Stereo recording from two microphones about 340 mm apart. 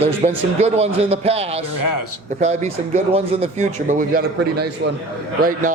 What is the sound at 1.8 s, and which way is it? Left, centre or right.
Speech, left.